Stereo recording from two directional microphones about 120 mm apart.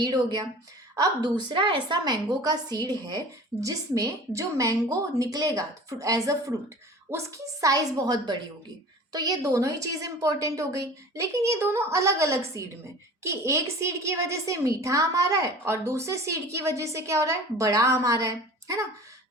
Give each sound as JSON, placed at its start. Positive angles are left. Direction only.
{"t": 0.0, "sound": "a woman's voice", "side_deg": -35}
{"t": 1.5, "sound": "a woman's voice", "side_deg": -45}